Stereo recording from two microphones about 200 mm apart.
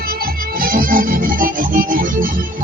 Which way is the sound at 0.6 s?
45° right (ahead or behind).